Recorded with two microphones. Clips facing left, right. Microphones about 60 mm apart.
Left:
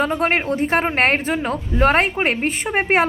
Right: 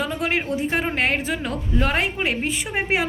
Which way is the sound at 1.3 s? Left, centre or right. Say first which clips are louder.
Left 4 dB; left.